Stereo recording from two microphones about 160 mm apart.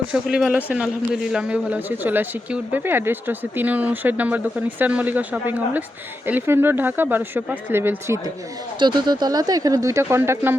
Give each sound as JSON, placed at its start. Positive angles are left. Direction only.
{"t": 0.1, "sound": "speech", "side_deg": -5}
{"t": 8.8, "sound": "speech", "side_deg": -30}